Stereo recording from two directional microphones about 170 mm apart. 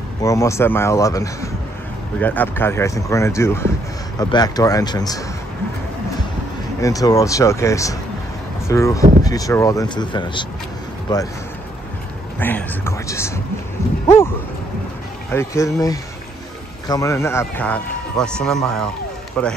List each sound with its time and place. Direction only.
0.2 s speech: 20° left (ahead or behind)
6.8 s speech: 20° left (ahead or behind)
12.4 s speech: 10° left (ahead or behind)
15.3 s speech: 20° left (ahead or behind)